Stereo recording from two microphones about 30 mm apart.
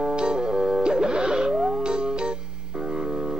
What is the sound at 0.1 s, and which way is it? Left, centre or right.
Music, right.